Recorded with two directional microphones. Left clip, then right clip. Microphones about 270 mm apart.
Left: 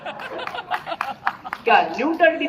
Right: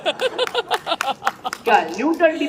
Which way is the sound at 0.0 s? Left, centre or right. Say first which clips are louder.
Right 9 dB; right.